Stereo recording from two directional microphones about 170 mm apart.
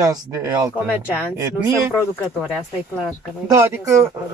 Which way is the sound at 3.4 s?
15° right (ahead or behind).